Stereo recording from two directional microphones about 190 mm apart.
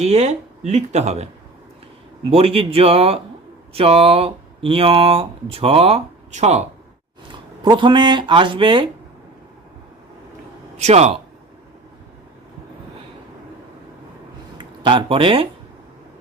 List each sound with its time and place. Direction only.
0.0 s speech: 35° right (ahead or behind)
2.3 s speech: 30° right (ahead or behind)
7.6 s speech: 25° right (ahead or behind)
10.8 s speech: 35° right (ahead or behind)
14.6 s speech: 25° right (ahead or behind)